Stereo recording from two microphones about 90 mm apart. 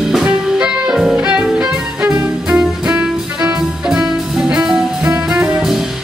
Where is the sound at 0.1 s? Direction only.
10° right (ahead or behind).